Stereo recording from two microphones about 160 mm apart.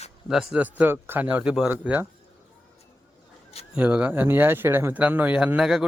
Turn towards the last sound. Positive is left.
turn(degrees=-5)  # may be behind; listen again after turning